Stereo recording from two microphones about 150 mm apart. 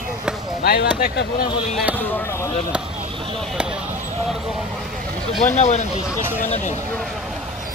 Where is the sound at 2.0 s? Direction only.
15° left (ahead or behind).